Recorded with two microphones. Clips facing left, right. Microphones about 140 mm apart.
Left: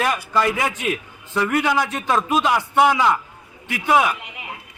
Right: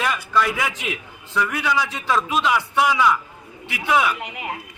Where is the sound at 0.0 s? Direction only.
45° left (ahead or behind).